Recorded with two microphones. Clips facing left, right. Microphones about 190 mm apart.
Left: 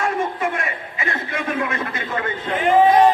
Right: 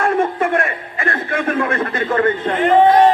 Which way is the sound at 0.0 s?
55° right (ahead or behind).